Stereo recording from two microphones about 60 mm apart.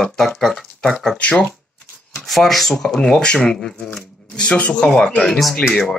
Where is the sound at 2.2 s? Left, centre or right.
Centre.